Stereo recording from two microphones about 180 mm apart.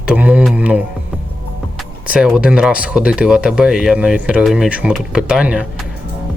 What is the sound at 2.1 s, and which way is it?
Speech, 5° right (ahead or behind).